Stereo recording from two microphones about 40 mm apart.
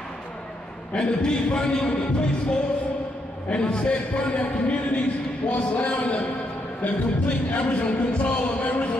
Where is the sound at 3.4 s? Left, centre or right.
Left.